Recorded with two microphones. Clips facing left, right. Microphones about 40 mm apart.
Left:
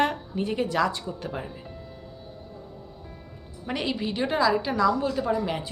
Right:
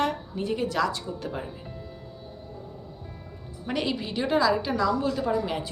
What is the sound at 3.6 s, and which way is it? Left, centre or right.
A woman's voice, centre.